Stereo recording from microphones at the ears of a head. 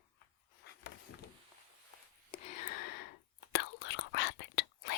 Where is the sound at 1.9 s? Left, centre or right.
Left.